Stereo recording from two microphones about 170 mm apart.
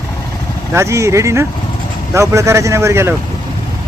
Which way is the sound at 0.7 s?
15° right (ahead or behind).